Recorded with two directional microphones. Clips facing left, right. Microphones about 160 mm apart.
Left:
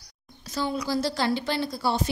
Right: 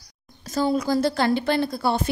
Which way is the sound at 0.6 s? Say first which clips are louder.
Right 6 dB; 45° right (ahead or behind).